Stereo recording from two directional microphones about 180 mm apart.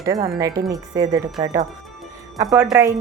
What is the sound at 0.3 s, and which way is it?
Speech, 20° right (ahead or behind).